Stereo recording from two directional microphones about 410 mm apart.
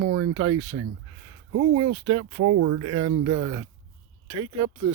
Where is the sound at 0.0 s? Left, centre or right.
Right.